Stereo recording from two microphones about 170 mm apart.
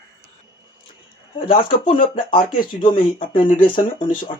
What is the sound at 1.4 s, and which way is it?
Speech, 30° left (ahead or behind).